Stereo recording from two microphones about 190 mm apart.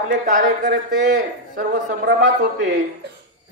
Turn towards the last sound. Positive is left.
turn(degrees=-70)  # may be behind; listen again after turning